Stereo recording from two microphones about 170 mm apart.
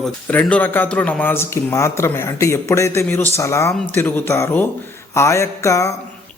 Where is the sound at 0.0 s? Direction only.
5° left (ahead or behind).